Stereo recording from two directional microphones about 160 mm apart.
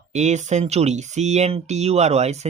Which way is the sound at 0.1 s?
45° right (ahead or behind).